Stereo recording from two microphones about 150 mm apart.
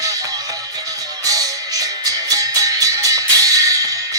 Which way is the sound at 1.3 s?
25° right (ahead or behind).